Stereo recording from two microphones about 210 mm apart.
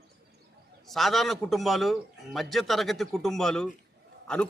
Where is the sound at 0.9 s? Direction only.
Centre (ahead or behind).